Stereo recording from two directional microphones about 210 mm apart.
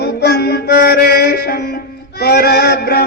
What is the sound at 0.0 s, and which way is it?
Music, 50° left (ahead or behind).